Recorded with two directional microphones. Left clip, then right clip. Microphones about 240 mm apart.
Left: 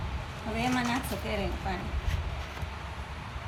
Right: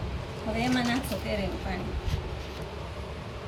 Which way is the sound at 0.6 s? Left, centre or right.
Left.